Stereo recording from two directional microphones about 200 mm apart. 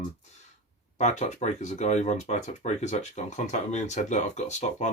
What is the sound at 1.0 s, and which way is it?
Speech, 35° left (ahead or behind).